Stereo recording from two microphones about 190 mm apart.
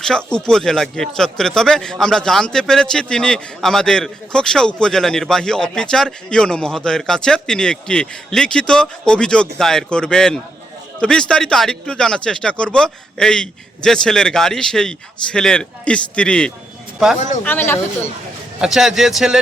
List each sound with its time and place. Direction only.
0.3 s speech: 5° left (ahead or behind)
17.2 s speech: 40° left (ahead or behind)
17.4 s speech: 10° left (ahead or behind)
18.6 s speech: centre (ahead or behind)